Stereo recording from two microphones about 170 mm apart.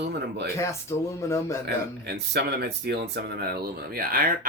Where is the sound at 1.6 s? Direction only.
75° right (ahead or behind).